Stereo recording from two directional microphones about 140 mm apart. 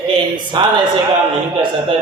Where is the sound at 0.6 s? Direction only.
30° right (ahead or behind).